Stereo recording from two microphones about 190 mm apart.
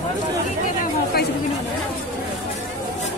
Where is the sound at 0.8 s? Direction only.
55° left (ahead or behind).